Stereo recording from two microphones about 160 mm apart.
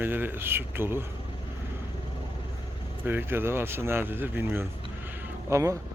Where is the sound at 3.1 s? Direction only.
15° right (ahead or behind).